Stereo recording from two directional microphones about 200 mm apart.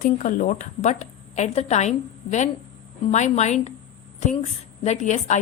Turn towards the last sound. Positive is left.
turn(degrees=35)  # may be behind; listen again after turning